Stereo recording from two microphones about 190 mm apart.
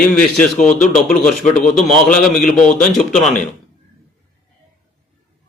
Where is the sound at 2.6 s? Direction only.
45° left (ahead or behind).